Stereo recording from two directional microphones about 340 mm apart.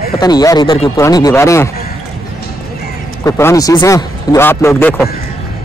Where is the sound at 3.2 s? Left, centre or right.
Centre.